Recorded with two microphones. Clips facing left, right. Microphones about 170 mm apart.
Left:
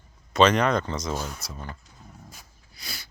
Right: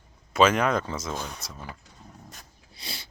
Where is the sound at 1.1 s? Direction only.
5° left (ahead or behind).